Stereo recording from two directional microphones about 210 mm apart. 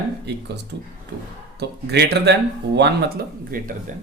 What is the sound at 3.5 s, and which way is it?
Speech, 45° right (ahead or behind).